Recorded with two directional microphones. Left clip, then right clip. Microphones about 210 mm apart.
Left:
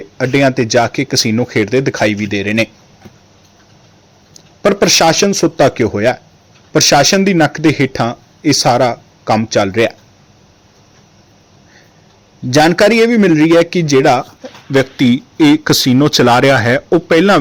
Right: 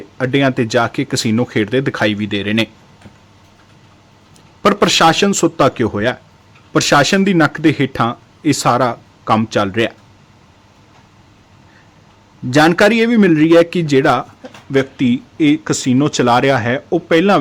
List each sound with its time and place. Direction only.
0.2 s speech: 10° left (ahead or behind)
4.6 s speech: 5° left (ahead or behind)
12.5 s speech: 10° left (ahead or behind)